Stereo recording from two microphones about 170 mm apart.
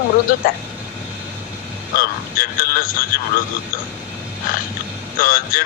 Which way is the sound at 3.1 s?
55° left (ahead or behind).